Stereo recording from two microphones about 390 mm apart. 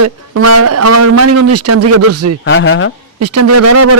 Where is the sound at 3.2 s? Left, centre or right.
Right.